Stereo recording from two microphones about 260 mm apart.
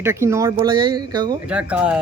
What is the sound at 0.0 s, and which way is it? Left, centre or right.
Speech, centre.